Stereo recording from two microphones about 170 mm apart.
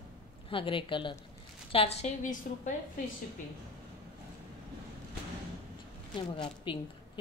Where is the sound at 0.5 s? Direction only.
30° left (ahead or behind).